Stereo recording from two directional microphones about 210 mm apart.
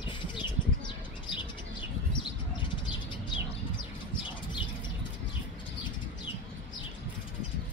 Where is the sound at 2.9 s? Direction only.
20° left (ahead or behind).